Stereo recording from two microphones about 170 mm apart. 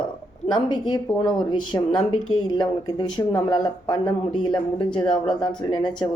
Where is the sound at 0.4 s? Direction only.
25° left (ahead or behind).